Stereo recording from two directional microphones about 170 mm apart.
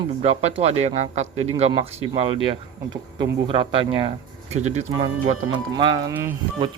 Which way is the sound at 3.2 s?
30° right (ahead or behind).